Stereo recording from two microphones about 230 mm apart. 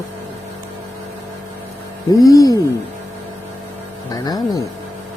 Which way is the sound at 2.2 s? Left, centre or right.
Centre.